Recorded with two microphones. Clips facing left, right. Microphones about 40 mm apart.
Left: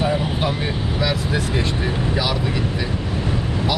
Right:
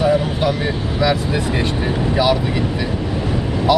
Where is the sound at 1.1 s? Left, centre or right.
Right.